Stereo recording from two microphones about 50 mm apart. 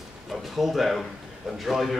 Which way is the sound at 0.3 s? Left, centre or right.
Centre.